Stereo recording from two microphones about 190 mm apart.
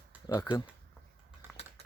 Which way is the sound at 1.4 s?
10° right (ahead or behind).